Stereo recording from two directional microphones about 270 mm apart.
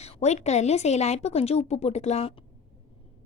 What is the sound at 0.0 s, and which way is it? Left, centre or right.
Speech, left.